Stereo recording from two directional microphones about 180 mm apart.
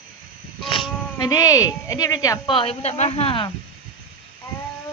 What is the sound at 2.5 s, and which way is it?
Speech, 30° left (ahead or behind).